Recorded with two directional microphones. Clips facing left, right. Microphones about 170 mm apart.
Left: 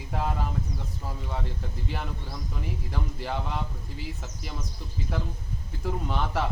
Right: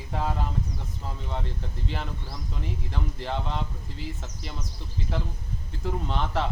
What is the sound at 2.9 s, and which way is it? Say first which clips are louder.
Speech: right 1 dB; 5° left (ahead or behind).